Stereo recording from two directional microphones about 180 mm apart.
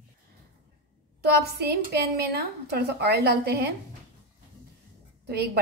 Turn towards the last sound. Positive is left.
turn(degrees=-65)  # may be behind; listen again after turning